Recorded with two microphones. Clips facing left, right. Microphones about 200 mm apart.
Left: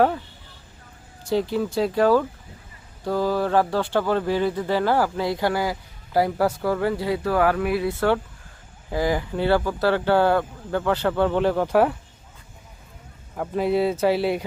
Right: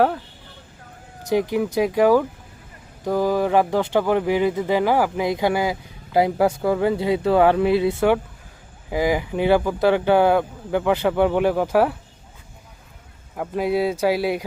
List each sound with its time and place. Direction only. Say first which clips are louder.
1.3 s speech: right 2 dB; 15° right (ahead or behind)
13.3 s speech: even; 5° right (ahead or behind)